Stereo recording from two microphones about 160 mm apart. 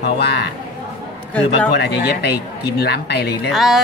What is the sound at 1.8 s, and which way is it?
Speech, 90° left.